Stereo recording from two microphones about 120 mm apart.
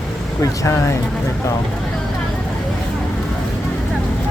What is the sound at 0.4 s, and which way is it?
Speech, 25° left (ahead or behind).